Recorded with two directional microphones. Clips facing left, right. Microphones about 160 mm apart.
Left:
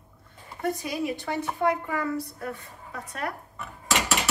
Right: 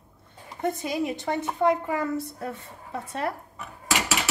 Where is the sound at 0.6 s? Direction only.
25° right (ahead or behind).